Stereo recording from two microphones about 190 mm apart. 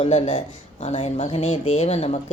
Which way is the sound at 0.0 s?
30° left (ahead or behind).